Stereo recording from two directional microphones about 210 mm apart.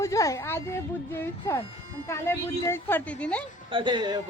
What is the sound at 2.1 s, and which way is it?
Speech, 10° left (ahead or behind).